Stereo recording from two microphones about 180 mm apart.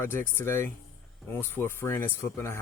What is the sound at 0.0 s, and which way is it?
Speech, 15° left (ahead or behind).